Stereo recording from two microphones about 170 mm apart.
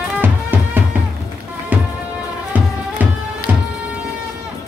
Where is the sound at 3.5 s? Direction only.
10° right (ahead or behind).